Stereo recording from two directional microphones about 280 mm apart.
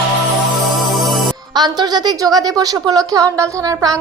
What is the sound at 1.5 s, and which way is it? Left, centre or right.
A woman's voice, centre.